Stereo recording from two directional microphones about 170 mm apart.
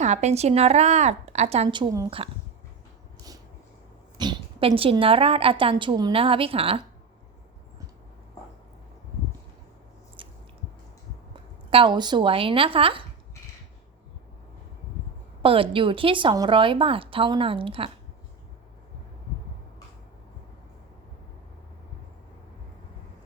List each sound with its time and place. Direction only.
0.0 s a woman's voice: 40° right (ahead or behind); by 2.1 s 25° right (ahead or behind)
4.2 s a woman's voice: 30° right (ahead or behind)
10.2 s squish: 30° right (ahead or behind)
11.7 s a woman's voice: 30° right (ahead or behind)
15.4 s a woman's voice: 30° right (ahead or behind)